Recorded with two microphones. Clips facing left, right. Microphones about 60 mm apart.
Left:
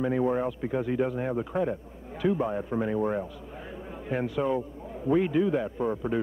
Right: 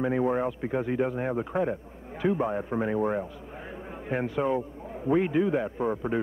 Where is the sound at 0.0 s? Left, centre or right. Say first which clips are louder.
Even; right.